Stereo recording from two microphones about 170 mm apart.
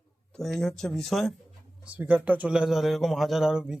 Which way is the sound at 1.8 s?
10° right (ahead or behind).